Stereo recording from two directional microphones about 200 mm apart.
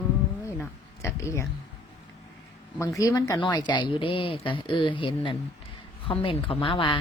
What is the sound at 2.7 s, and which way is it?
Speech, 15° left (ahead or behind).